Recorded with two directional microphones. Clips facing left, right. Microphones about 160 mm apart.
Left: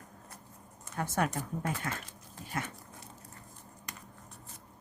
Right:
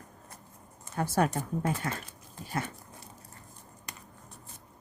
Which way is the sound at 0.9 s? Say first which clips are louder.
Right 4 dB; 35° right (ahead or behind).